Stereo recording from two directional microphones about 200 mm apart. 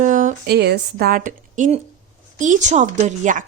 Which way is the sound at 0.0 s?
40° right (ahead or behind).